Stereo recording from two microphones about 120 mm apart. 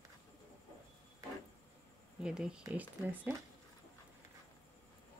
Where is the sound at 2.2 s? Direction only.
5° right (ahead or behind).